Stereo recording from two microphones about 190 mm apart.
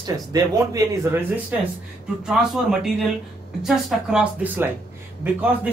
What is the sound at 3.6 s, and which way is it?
Speech, centre (ahead or behind).